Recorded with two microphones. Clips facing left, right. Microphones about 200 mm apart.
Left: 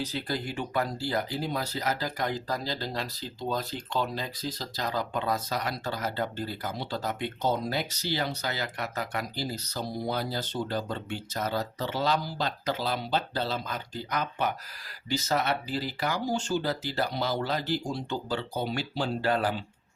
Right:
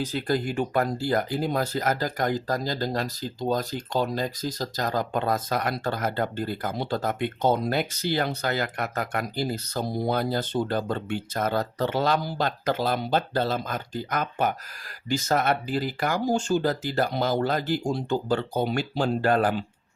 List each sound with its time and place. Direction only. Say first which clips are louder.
0.0 s speech: right 6 dB; 50° right (ahead or behind)